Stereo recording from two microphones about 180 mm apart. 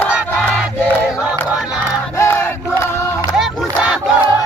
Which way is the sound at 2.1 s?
15° left (ahead or behind).